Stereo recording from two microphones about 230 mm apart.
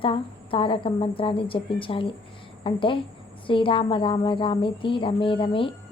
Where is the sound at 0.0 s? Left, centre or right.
Left.